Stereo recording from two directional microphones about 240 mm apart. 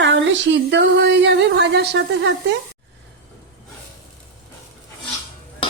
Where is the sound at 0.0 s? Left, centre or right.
Right.